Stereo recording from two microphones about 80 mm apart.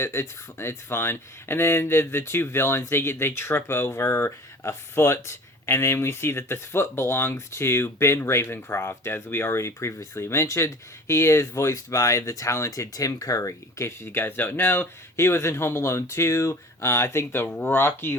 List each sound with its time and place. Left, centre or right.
0.0 s speech: left